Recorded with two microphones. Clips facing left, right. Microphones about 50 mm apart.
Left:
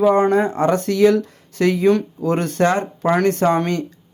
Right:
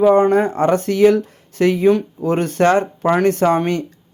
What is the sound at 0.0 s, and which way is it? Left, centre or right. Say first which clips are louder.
Speech: right 2 dB; right.